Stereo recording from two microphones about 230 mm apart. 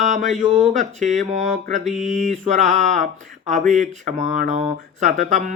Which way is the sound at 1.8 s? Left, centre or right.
Centre.